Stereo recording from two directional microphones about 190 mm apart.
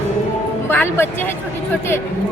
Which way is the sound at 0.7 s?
10° left (ahead or behind).